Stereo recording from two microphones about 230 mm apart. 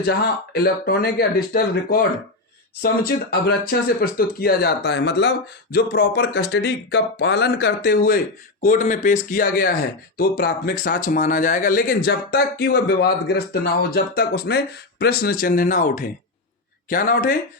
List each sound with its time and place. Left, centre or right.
0.0 s speech: left